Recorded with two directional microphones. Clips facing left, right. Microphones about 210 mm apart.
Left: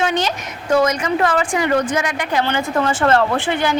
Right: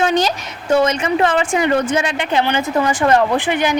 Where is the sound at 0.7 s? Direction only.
25° right (ahead or behind).